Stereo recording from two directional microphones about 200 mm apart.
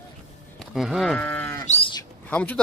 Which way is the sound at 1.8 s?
20° left (ahead or behind).